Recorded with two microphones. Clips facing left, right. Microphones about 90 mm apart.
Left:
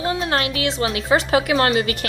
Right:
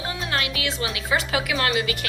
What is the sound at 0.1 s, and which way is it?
A woman's voice, 35° left (ahead or behind).